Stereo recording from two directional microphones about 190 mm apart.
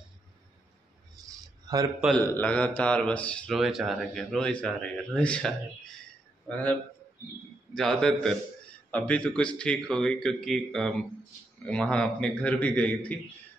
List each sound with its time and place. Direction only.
1.2 s a sound: 20° right (ahead or behind)
2.1 s speech: 10° left (ahead or behind)
6.5 s a man's voice: 10° left (ahead or behind)